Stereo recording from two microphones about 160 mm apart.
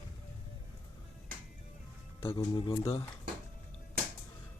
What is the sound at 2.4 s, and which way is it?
Speech, 30° left (ahead or behind).